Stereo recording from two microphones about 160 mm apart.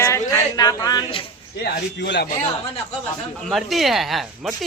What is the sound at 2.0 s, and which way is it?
Speech, 90° left.